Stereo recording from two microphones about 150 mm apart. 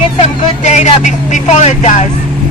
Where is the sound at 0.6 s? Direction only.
50° left (ahead or behind).